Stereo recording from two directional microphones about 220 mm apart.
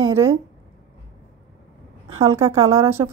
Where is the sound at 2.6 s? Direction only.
10° right (ahead or behind).